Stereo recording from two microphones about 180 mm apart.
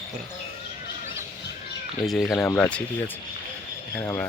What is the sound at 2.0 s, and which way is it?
Speech, centre (ahead or behind).